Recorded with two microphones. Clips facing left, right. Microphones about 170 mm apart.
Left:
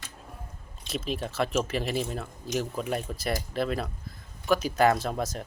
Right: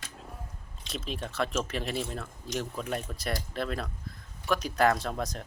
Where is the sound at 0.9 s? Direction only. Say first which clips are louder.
Left 5 dB; 5° left (ahead or behind).